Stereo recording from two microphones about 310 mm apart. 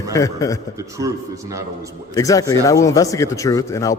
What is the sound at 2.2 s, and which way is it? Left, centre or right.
A man's voice, centre.